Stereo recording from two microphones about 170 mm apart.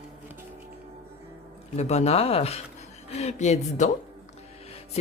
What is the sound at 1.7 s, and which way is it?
Speech, 40° left (ahead or behind).